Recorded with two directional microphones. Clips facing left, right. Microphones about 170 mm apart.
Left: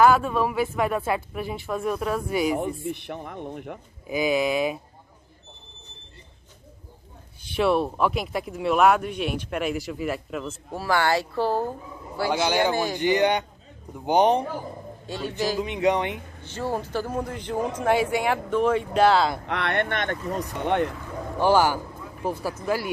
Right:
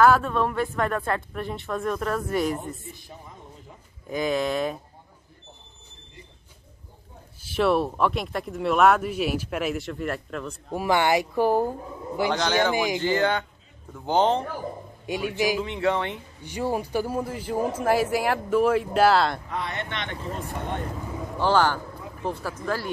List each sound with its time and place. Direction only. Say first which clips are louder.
0.0 s speech: even; 5° left (ahead or behind)
2.5 s speech: left 7 dB; 70° left (ahead or behind)
4.1 s speech: left 2 dB; 5° left (ahead or behind)
7.4 s speech: even; centre (ahead or behind)
10.7 s speech: right 1 dB; 15° right (ahead or behind)
12.3 s speech: left 2 dB; 10° left (ahead or behind)
12.7 s speech: right 1 dB; 15° right (ahead or behind)
13.0 s speech: left 2 dB; 15° left (ahead or behind)
15.0 s speech: right 2 dB; 15° right (ahead or behind)
15.6 s speech: left 2 dB; 15° left (ahead or behind)
16.4 s speech: right 2 dB; 15° right (ahead or behind)
19.4 s speech: left 6 dB; 75° left (ahead or behind); by 20.4 s 45° left (ahead or behind)
20.5 s speech: left 10 dB; 70° left (ahead or behind)
21.4 s speech: left 2 dB; 10° left (ahead or behind)